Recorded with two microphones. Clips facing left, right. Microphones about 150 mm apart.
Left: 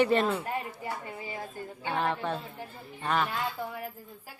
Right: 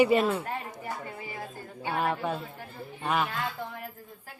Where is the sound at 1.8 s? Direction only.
10° right (ahead or behind).